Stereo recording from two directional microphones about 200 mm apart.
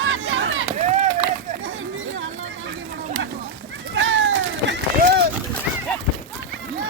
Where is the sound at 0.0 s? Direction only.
70° right (ahead or behind).